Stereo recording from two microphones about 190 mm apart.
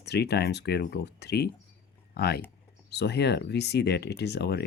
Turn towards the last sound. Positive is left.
turn(degrees=60)  # may be behind; listen again after turning